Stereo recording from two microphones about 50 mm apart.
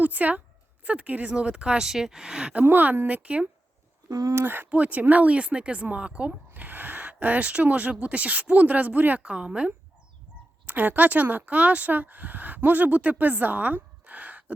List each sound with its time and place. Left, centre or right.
0.0 s a woman's voice: right
1.3 s speech: centre
2.6 s speech: right
4.4 s speech: right
6.5 s speech: right
9.2 s speech: centre
10.7 s speech: right
14.0 s a sound: right